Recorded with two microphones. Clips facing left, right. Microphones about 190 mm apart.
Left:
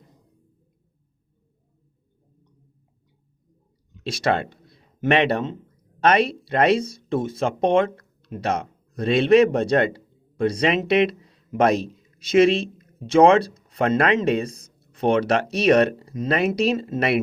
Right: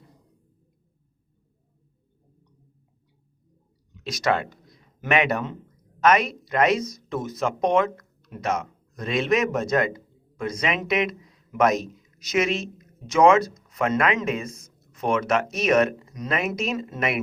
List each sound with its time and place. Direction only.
4.0 s speech: 30° left (ahead or behind)